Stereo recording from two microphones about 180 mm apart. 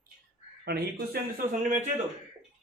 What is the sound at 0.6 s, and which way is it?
Speech, 65° right (ahead or behind).